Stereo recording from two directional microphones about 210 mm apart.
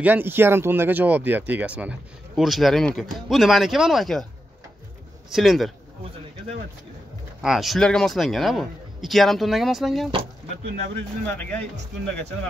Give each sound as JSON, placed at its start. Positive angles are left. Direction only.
{"t": 0.0, "sound": "speech", "side_deg": -10}
{"t": 5.3, "sound": "speech", "side_deg": 0}
{"t": 7.4, "sound": "speech", "side_deg": 0}
{"t": 10.6, "sound": "speech", "side_deg": -40}
{"t": 11.2, "sound": "speech", "side_deg": 5}